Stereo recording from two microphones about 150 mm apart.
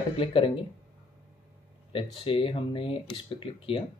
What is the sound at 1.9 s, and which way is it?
Speech, 35° left (ahead or behind).